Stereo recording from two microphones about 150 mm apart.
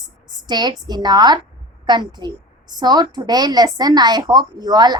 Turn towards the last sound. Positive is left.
turn(degrees=-25)  # may be behind; listen again after turning